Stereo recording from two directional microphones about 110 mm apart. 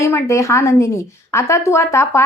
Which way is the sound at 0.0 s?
25° left (ahead or behind).